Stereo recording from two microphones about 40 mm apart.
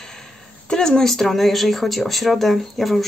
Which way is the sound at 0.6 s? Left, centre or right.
Centre.